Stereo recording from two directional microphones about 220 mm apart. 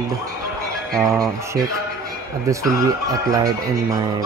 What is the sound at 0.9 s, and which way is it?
Speech, 15° right (ahead or behind).